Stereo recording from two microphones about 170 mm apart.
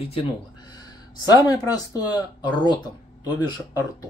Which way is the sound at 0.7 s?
25° left (ahead or behind).